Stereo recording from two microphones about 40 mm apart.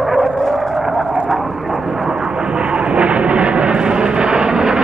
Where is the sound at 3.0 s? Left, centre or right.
Right.